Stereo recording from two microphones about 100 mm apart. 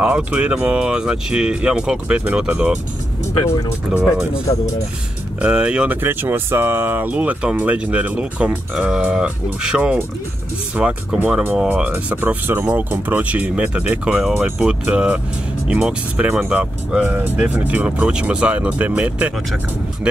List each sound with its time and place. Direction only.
0.0 s speech: 10° right (ahead or behind)
3.9 s speech: 5° right (ahead or behind)
5.4 s speech: 10° right (ahead or behind)